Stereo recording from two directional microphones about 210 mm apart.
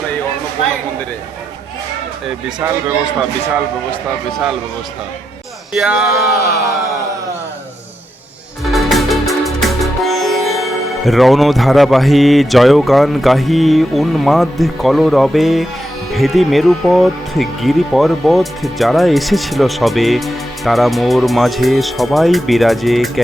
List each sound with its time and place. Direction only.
2.6 s a man's voice: 10° right (ahead or behind)
4.3 s speech: centre (ahead or behind)
5.7 s speech: centre (ahead or behind)
8.6 s music: centre (ahead or behind)
16.1 s speech: centre (ahead or behind)